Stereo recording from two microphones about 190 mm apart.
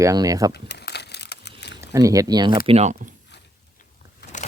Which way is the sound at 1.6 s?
65° left (ahead or behind).